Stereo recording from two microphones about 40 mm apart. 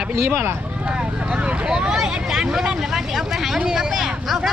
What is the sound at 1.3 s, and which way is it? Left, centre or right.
Vehicle, right.